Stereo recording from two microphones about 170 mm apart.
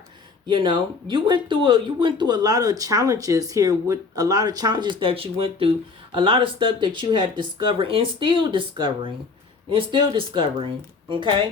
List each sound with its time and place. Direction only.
0.4 s speech: 25° right (ahead or behind)